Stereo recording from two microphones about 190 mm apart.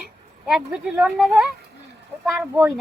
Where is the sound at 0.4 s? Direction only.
Centre (ahead or behind).